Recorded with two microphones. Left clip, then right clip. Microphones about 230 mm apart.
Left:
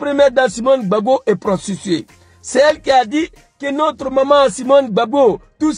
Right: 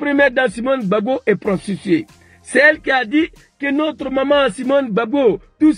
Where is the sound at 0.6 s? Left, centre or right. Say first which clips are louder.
Left 4 dB; left.